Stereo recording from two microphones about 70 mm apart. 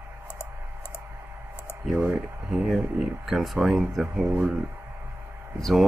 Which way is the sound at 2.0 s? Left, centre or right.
Right.